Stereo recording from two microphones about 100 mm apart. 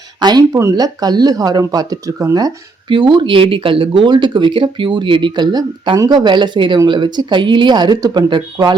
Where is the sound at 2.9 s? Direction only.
50° right (ahead or behind).